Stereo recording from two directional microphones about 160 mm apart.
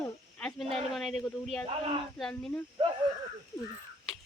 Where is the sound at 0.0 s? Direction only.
5° left (ahead or behind).